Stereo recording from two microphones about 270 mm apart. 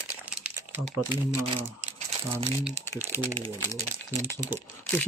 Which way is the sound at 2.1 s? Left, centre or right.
Right.